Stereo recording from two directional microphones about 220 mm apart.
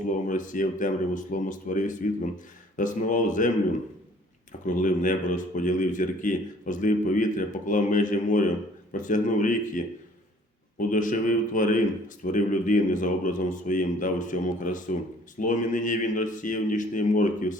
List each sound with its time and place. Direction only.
0.3 s speech: 35° left (ahead or behind)
4.6 s speech: 35° left (ahead or behind)